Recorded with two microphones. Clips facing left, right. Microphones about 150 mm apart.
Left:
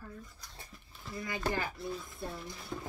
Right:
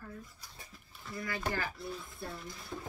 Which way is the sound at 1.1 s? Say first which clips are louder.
Left 2 dB; 20° left (ahead or behind).